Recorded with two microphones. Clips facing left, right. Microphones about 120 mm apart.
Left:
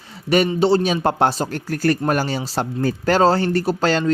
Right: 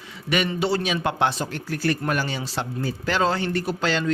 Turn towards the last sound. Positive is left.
turn(degrees=40)  # may be behind; listen again after turning